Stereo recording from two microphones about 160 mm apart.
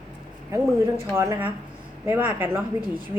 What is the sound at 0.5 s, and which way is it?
Speech, 20° right (ahead or behind).